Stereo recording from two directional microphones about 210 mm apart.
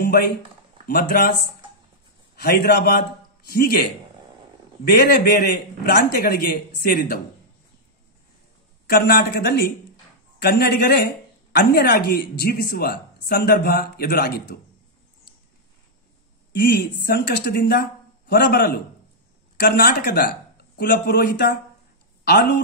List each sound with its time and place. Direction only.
0.0 s a man's voice: 45° left (ahead or behind)
2.4 s speech: 45° left (ahead or behind)
4.8 s speech: 45° left (ahead or behind)
8.8 s speech: 45° left (ahead or behind)
16.5 s speech: 50° left (ahead or behind)